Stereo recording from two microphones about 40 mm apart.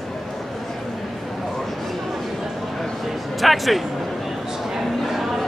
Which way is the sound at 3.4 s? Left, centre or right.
Centre.